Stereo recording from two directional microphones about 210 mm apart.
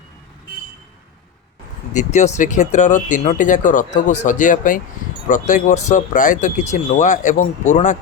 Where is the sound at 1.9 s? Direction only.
35° left (ahead or behind).